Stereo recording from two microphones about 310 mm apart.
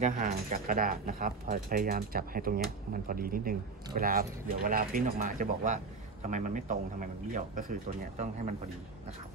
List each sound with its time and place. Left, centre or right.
0.0 s speech: right